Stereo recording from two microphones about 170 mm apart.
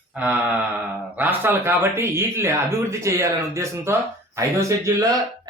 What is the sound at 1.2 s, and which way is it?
Speech, 10° right (ahead or behind).